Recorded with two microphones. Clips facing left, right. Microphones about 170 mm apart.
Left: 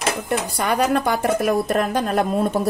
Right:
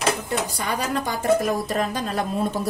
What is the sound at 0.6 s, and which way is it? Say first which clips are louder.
A woman's voice: left 6 dB; 65° left (ahead or behind).